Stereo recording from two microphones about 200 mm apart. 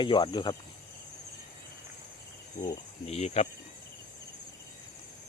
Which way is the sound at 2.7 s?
30° left (ahead or behind).